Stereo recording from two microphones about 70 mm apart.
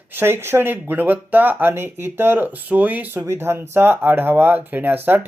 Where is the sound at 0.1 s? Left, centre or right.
Right.